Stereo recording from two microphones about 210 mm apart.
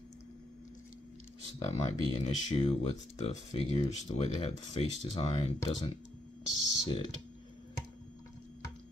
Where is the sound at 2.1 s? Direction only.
30° left (ahead or behind).